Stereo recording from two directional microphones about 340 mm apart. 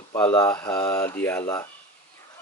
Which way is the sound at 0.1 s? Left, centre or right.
Centre.